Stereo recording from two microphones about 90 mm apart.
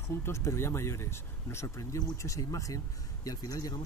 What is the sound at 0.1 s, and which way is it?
Speech, 30° left (ahead or behind).